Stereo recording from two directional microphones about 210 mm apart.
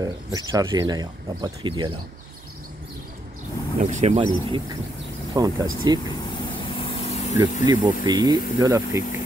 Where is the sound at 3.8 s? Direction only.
35° right (ahead or behind); by 6.0 s 20° right (ahead or behind).